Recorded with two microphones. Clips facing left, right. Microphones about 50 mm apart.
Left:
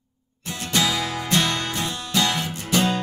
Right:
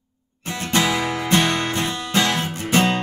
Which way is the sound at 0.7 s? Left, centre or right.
Right.